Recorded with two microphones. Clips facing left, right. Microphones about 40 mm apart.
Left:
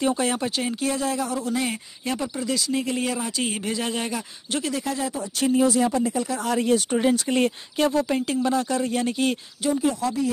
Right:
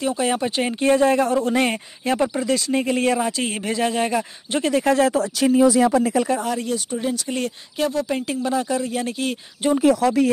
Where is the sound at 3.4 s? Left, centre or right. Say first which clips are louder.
Right 4 dB; centre.